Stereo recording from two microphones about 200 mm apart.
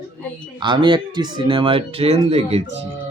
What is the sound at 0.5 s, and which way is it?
Speech, 20° right (ahead or behind).